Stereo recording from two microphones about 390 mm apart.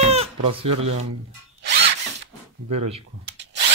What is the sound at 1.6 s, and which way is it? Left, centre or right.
Drill, right.